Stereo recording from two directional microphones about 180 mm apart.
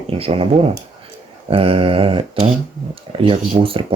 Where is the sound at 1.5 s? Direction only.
30° right (ahead or behind).